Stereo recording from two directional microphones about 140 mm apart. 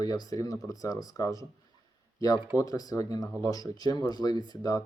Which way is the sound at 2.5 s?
25° left (ahead or behind).